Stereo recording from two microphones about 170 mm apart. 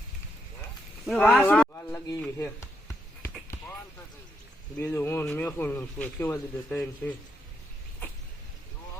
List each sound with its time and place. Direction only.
1.0 s speech: 5° left (ahead or behind)
2.4 s a sound: 15° left (ahead or behind)
4.8 s speech: 15° left (ahead or behind)